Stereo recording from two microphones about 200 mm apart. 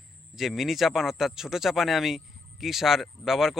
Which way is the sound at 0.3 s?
Centre (ahead or behind).